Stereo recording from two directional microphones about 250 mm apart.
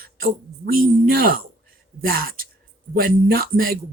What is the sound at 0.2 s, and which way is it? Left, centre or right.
Speech, right.